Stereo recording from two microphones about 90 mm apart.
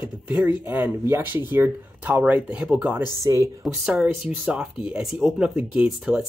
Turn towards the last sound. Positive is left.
turn(degrees=-10)  # may be behind; listen again after turning